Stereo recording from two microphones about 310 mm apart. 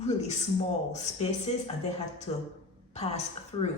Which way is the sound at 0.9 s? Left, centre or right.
Left.